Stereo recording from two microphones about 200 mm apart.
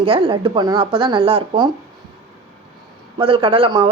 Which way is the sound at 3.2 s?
25° right (ahead or behind).